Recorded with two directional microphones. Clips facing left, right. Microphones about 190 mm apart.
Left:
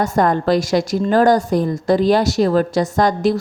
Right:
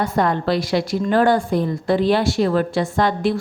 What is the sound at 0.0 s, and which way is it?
A woman's voice, 45° left (ahead or behind).